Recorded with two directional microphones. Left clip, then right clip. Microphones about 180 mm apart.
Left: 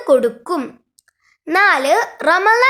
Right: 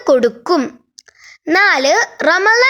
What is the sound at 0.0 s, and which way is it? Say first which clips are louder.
A child's voice: right 2 dB; 35° right (ahead or behind).